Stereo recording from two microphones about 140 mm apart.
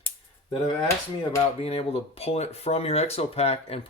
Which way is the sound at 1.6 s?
45° left (ahead or behind).